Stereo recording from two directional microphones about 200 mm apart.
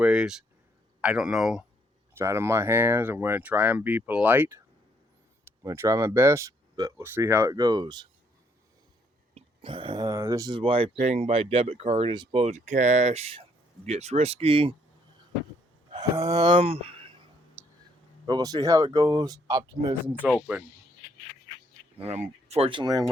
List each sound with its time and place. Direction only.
0.0 s speech: 5° right (ahead or behind); by 8.0 s 20° right (ahead or behind)
9.3 s speech: 25° right (ahead or behind)
15.9 s speech: 20° right (ahead or behind)
17.6 s whispering: 15° right (ahead or behind)
18.3 s speech: 20° right (ahead or behind)
20.1 s speech: 5° right (ahead or behind)
21.9 s speech: 30° right (ahead or behind)